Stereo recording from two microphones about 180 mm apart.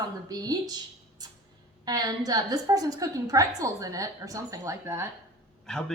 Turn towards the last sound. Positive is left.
turn(degrees=5)  # may be behind; listen again after turning